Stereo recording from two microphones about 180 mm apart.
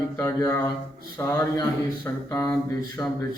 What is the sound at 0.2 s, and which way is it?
A man's voice, 10° left (ahead or behind).